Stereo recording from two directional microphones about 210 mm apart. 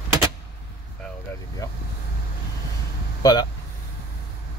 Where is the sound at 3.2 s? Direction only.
20° left (ahead or behind).